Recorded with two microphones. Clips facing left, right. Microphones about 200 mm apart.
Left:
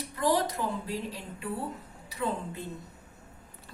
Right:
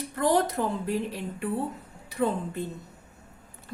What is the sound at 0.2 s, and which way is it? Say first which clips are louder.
Speech: right 4 dB; 50° right (ahead or behind).